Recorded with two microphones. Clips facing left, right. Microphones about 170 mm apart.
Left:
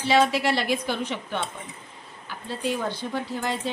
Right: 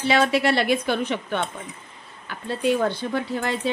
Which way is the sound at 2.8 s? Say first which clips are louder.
Right 4 dB; 65° right (ahead or behind).